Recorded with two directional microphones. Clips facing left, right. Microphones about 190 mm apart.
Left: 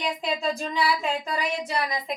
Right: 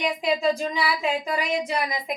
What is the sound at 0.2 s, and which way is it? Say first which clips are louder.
Speech: right 5 dB; 10° right (ahead or behind).